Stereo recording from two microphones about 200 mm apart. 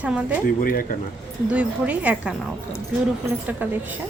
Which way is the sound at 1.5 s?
5° right (ahead or behind).